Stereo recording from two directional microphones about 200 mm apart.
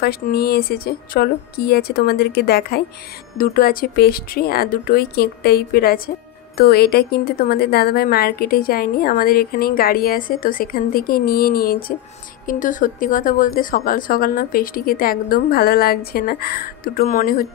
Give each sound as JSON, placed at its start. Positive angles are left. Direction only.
{"t": 0.0, "sound": "speech", "side_deg": 50}